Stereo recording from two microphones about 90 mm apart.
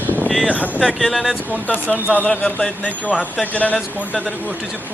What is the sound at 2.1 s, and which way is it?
Speech, 15° left (ahead or behind).